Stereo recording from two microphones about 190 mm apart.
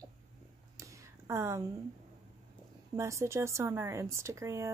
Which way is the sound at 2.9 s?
15° right (ahead or behind).